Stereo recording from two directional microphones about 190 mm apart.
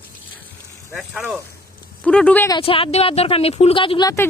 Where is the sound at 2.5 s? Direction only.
30° left (ahead or behind).